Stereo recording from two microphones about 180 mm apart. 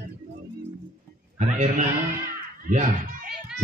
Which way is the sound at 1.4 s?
40° right (ahead or behind).